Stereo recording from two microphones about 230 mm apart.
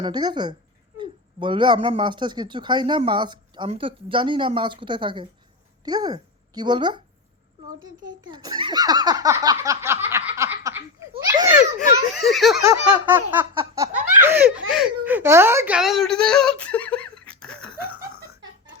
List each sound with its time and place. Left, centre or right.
0.0 s speech: centre
8.3 s speech: centre
11.3 s laughter: centre
12.1 s giggle: centre
12.6 s laughter: centre
13.5 s a sound: centre
14.2 s laughter: centre
14.7 s speech: centre